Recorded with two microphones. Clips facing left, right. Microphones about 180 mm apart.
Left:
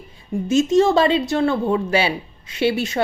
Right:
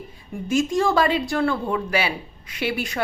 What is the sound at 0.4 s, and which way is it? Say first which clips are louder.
Speech: left 5 dB; 25° left (ahead or behind).